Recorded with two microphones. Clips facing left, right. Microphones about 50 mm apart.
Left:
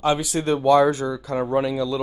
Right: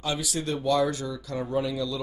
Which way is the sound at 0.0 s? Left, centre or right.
Left.